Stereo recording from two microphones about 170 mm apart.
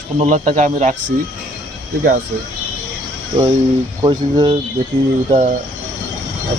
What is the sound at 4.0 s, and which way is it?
Speech, 25° right (ahead or behind).